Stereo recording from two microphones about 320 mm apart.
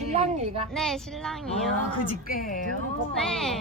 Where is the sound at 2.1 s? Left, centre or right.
Left.